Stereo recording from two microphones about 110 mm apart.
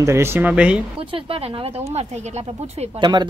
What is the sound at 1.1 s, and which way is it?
Speech, 55° right (ahead or behind).